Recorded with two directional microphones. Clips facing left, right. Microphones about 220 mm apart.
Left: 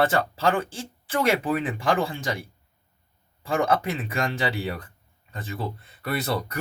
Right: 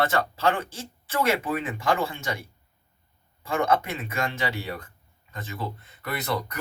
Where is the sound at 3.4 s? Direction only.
30° left (ahead or behind).